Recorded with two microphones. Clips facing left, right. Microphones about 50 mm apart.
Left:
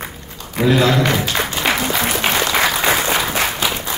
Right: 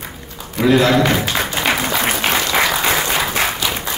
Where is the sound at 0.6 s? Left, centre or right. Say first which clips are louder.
Right 1 dB; centre.